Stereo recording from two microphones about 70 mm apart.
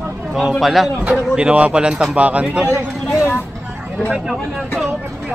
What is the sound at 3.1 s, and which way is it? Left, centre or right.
Vehicle, left.